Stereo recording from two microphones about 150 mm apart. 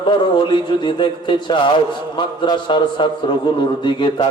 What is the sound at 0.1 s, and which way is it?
A man's voice, 30° left (ahead or behind).